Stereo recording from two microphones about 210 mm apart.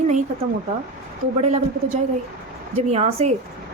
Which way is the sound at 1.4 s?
30° right (ahead or behind).